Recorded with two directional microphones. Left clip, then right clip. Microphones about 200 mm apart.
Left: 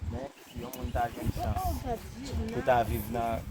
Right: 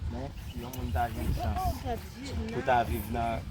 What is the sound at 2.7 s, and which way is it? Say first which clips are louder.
Speech: even; 55° left (ahead or behind).